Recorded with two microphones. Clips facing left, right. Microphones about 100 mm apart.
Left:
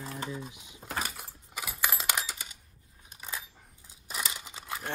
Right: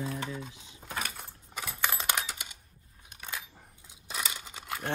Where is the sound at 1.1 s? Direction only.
10° left (ahead or behind).